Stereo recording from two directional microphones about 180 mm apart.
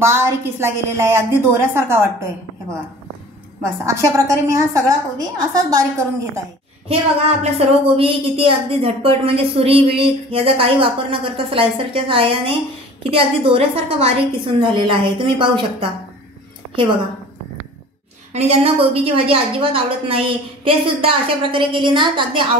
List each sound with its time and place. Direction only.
0.0 s a woman's voice: 15° right (ahead or behind)
3.6 s a woman's voice: 15° right (ahead or behind)
6.9 s a woman's voice: 35° right (ahead or behind)
18.3 s a woman's voice: 35° right (ahead or behind)